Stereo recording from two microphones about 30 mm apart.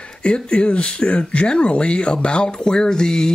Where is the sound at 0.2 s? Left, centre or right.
Left.